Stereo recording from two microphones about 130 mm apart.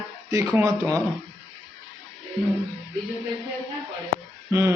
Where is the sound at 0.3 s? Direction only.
25° right (ahead or behind).